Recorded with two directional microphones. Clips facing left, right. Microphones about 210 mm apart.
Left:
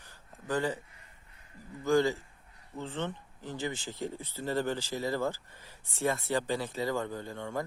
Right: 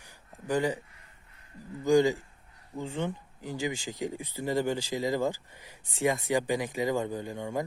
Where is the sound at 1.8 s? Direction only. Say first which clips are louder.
Right 4 dB; 15° right (ahead or behind).